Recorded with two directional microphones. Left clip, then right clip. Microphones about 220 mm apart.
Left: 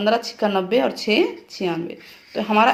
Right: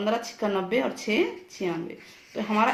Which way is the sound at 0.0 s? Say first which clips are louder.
Left 7 dB; 25° left (ahead or behind).